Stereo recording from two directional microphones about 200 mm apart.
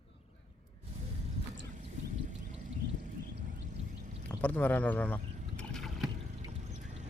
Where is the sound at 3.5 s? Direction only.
40° right (ahead or behind).